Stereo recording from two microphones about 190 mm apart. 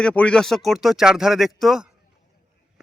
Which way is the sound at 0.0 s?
5° left (ahead or behind).